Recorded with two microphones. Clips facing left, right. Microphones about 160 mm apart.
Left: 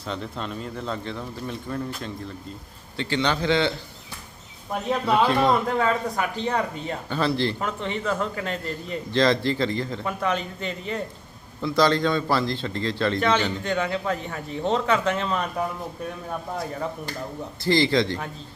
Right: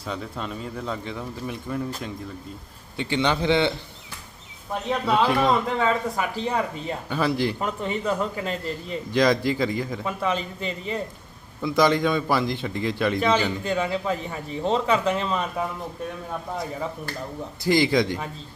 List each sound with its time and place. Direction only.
0.0 s a man's voice: 5° right (ahead or behind)
3.0 s a man's voice: 15° right (ahead or behind)
4.7 s a man's voice: 5° left (ahead or behind)
5.2 s a man's voice: 10° right (ahead or behind)
5.5 s a man's voice: centre (ahead or behind)
11.6 s a man's voice: 15° right (ahead or behind); by 16.9 s centre (ahead or behind)
17.7 s a man's voice: 15° right (ahead or behind)